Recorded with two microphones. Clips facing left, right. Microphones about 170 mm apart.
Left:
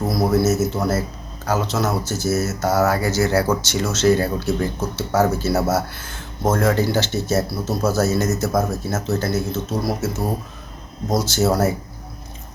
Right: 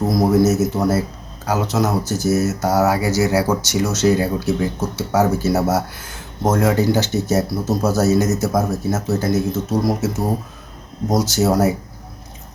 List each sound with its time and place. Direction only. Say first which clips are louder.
0.1 s speech: right 3 dB; 15° right (ahead or behind)
11.1 s speech: right 2 dB; 15° right (ahead or behind)